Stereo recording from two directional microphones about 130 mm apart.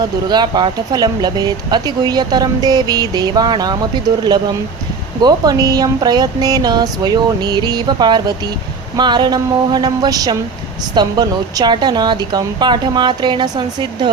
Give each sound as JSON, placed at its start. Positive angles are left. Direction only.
{"t": 0.0, "sound": "speech", "side_deg": -35}
{"t": 5.2, "sound": "speech", "side_deg": -30}